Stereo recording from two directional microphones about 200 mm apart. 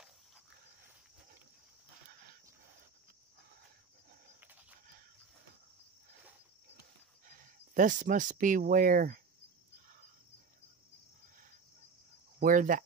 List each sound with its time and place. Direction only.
7.2 s speech: 40° right (ahead or behind)
12.4 s speech: 45° right (ahead or behind)